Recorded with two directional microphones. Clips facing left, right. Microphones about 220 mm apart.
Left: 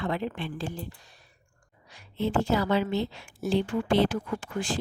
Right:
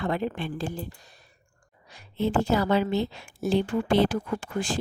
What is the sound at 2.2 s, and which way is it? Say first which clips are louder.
Speech: right 2 dB; 45° right (ahead or behind).